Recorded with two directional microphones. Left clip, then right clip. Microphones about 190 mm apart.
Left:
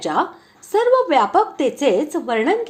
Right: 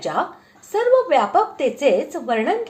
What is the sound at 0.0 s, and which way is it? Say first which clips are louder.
Speech: left 2 dB; 35° left (ahead or behind).